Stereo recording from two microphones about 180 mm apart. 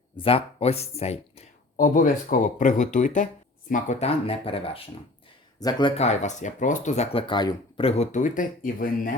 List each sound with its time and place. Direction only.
0.2 s speech: 30° left (ahead or behind)
1.7 s speech: 50° left (ahead or behind); by 5.9 s 20° left (ahead or behind)
6.0 s speech: 40° left (ahead or behind)